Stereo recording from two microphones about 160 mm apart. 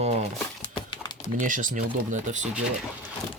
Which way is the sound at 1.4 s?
55° right (ahead or behind).